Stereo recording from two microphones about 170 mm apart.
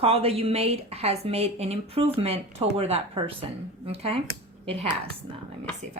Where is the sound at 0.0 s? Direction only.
35° right (ahead or behind).